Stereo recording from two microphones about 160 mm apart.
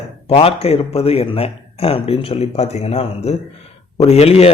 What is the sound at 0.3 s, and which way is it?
A man's voice, 40° left (ahead or behind).